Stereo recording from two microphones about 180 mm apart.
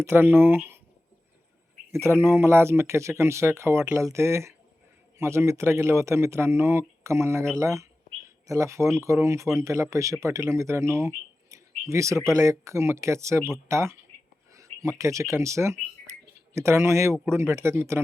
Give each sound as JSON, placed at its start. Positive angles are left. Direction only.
{"t": 0.0, "sound": "speech", "side_deg": -10}
{"t": 1.9, "sound": "speech", "side_deg": -15}
{"t": 16.1, "sound": "a sound", "side_deg": -15}
{"t": 16.6, "sound": "speech", "side_deg": -15}